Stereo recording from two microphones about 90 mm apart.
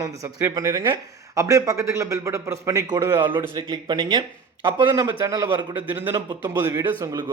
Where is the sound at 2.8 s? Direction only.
50° right (ahead or behind).